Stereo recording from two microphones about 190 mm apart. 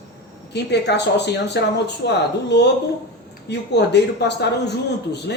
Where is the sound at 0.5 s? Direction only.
65° left (ahead or behind).